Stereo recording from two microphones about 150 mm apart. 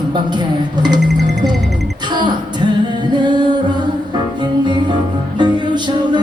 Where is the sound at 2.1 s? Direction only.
30° right (ahead or behind).